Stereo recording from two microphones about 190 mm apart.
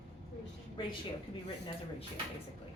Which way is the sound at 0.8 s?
25° left (ahead or behind).